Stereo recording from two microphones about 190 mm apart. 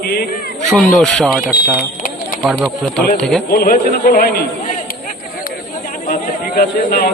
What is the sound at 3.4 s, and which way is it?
A man's voice, 50° left (ahead or behind).